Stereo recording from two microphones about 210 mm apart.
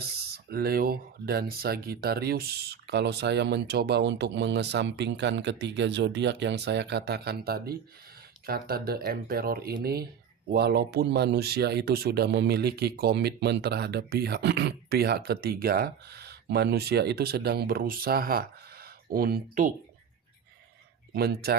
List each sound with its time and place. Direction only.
0.5 s speech: 45° right (ahead or behind)
21.1 s speech: 50° right (ahead or behind)